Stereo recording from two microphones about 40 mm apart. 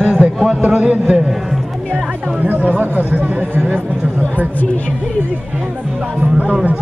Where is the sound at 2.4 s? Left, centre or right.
Right.